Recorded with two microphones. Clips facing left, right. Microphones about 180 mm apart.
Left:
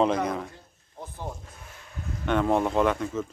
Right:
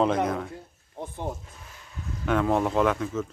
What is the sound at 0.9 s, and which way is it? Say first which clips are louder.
Speech: right 4 dB; 25° right (ahead or behind).